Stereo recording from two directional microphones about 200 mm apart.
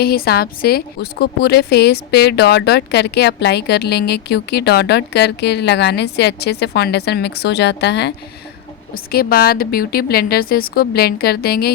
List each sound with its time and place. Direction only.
0.0 s a woman's voice: 50° left (ahead or behind)
9.1 s a woman's voice: 50° left (ahead or behind)